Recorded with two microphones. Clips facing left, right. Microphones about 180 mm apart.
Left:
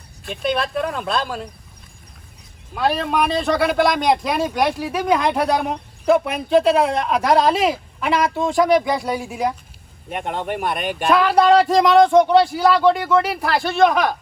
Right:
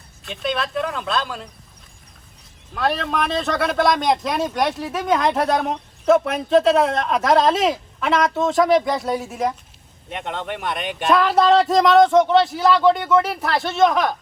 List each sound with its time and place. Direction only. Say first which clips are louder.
0.8 s speech: left 1 dB; centre (ahead or behind)
2.7 s speech: left 2 dB; centre (ahead or behind)
10.1 s speech: left 3 dB; 50° left (ahead or behind)
11.1 s speech: left 1 dB; centre (ahead or behind)